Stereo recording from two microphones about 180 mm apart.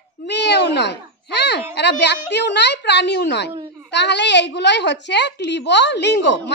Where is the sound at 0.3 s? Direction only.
70° left (ahead or behind).